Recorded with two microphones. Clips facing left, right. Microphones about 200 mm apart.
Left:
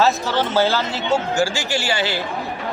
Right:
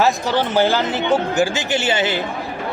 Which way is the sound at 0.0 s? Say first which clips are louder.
Right 1 dB; 15° right (ahead or behind).